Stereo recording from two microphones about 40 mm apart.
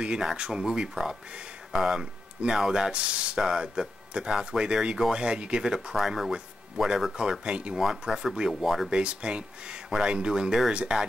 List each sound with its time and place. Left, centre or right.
0.0 s speech: right
5.9 s speech: centre
6.3 s speech: centre
7.7 s speech: centre
8.9 s speech: right